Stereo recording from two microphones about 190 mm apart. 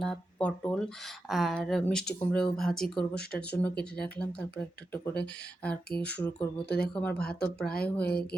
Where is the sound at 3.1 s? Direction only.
55° left (ahead or behind).